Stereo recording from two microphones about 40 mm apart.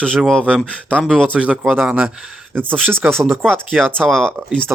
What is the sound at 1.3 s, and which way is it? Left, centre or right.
Speech, right.